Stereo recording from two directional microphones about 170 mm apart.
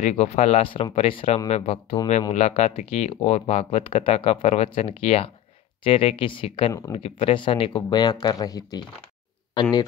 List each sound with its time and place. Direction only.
0.0 s speech: 40° left (ahead or behind)